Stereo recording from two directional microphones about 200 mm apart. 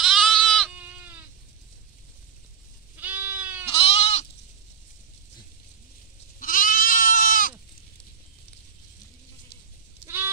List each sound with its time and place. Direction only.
0.0 s sheep: centre (ahead or behind)
0.7 s sheep: 5° right (ahead or behind)
3.0 s goat: 10° right (ahead or behind)
3.6 s goat: 30° left (ahead or behind)
6.4 s goat: 45° left (ahead or behind)
10.0 s goat: 10° right (ahead or behind)